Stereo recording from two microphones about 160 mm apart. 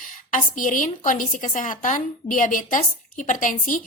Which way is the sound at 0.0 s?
55° left (ahead or behind).